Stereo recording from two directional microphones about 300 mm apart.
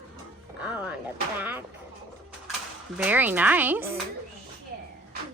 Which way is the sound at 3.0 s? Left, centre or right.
Centre.